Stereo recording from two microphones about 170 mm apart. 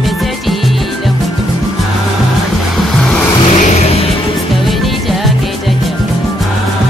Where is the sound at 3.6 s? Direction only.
40° left (ahead or behind).